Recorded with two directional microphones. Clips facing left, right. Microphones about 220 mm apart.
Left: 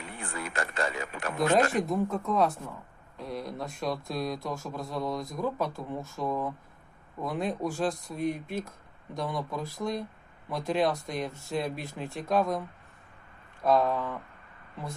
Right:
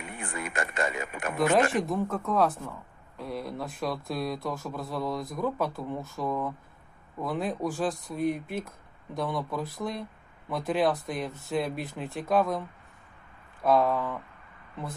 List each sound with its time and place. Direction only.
0.0 s speech: 15° right (ahead or behind)
0.9 s speech: 5° right (ahead or behind)